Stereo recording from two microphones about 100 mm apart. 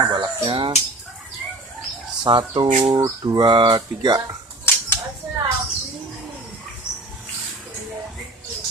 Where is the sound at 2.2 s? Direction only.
60° right (ahead or behind).